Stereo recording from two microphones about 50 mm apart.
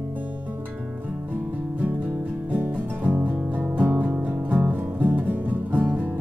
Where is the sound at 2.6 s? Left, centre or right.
Right.